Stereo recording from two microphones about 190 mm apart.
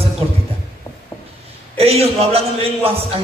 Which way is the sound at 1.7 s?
30° right (ahead or behind).